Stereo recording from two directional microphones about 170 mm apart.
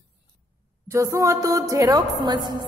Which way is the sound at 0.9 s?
15° right (ahead or behind).